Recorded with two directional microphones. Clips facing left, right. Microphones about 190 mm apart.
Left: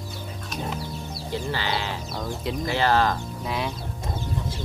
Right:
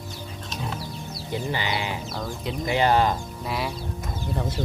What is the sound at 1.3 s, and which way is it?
Speech, 15° right (ahead or behind).